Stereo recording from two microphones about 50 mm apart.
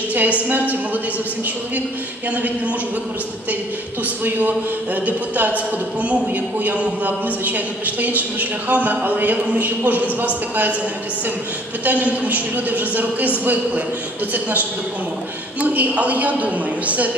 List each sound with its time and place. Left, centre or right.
0.1 s a man's voice: right
4.2 s a man's voice: right
11.8 s a man's voice: right
14.3 s a man's voice: right